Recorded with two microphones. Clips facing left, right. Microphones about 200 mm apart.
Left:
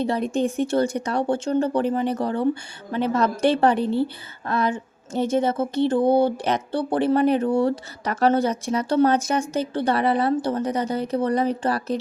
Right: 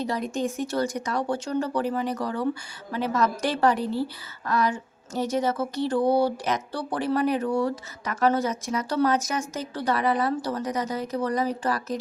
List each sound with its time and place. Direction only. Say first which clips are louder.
0.7 s a woman's voice: left 5 dB; 30° left (ahead or behind)